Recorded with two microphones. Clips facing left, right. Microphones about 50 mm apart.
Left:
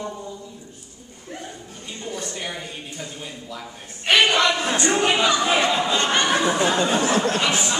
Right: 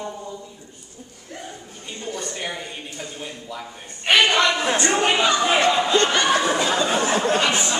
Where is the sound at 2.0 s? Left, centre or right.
Centre.